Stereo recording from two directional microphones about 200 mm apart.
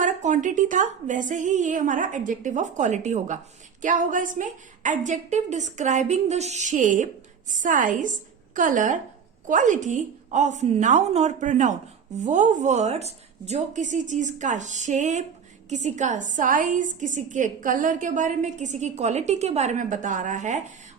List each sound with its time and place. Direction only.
0.0 s a woman's voice: 40° right (ahead or behind)